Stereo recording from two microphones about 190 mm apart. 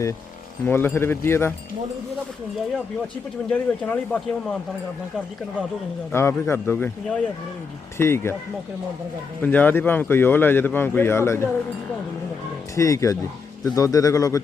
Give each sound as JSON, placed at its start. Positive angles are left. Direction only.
{"t": 0.6, "sound": "speech", "side_deg": 10}
{"t": 3.5, "sound": "speech", "side_deg": 5}
{"t": 6.1, "sound": "speech", "side_deg": 15}
{"t": 7.9, "sound": "speech", "side_deg": 15}
{"t": 9.4, "sound": "speech", "side_deg": 10}
{"t": 12.7, "sound": "speech", "side_deg": 15}